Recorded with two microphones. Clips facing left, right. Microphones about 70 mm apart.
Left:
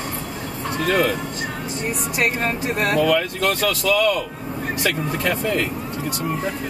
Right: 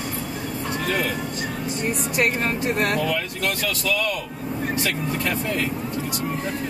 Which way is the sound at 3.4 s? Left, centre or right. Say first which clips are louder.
Left 5 dB; left.